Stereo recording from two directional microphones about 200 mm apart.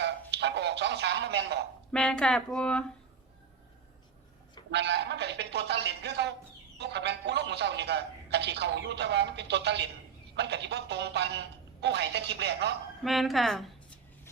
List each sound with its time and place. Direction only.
0.3 s speech: 60° right (ahead or behind)
1.9 s speech: 5° left (ahead or behind)
4.7 s a man's voice: 60° right (ahead or behind)
13.1 s a woman's voice: centre (ahead or behind)